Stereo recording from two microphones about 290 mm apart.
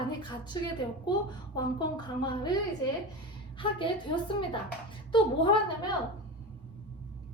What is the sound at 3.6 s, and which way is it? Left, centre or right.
A woman's voice, centre.